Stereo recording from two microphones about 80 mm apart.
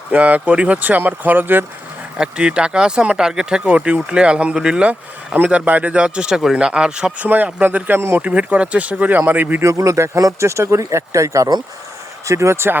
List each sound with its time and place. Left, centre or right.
0.1 s speech: centre
2.1 s speech: centre
4.9 s speech: centre
7.3 s speech: right
9.6 s speech: right